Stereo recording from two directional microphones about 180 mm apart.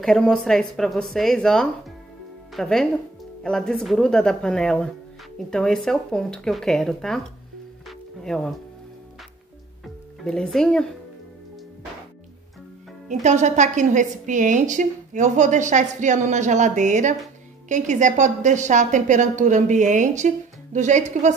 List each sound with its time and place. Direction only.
0.0 s speech: 5° left (ahead or behind)
8.2 s speech: centre (ahead or behind)
10.2 s speech: 5° left (ahead or behind)
13.1 s a woman's voice: 40° right (ahead or behind)